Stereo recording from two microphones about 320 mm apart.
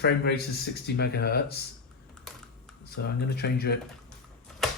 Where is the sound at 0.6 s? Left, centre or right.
Left.